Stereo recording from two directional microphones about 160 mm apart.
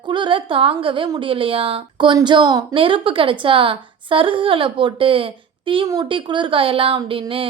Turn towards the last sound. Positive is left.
turn(degrees=-35)  # may be behind; listen again after turning